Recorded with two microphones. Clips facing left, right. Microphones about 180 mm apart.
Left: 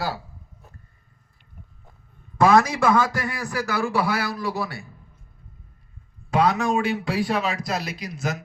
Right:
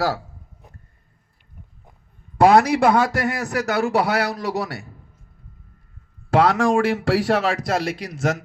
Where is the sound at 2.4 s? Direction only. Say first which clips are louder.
Right 3 dB; 60° right (ahead or behind).